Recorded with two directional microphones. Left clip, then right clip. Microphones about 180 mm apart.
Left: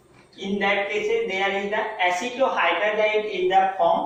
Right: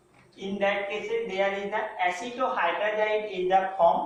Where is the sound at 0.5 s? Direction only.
Centre (ahead or behind).